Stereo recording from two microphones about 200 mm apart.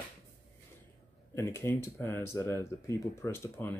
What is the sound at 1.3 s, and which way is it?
Speech, 15° left (ahead or behind).